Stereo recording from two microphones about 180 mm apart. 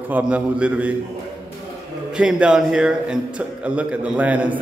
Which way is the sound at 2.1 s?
5° right (ahead or behind).